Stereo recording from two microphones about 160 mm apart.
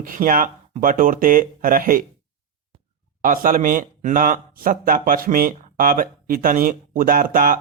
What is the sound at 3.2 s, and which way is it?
Speech, 60° right (ahead or behind).